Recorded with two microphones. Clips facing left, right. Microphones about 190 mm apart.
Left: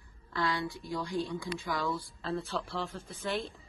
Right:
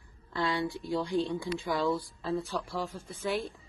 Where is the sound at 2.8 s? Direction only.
Centre (ahead or behind).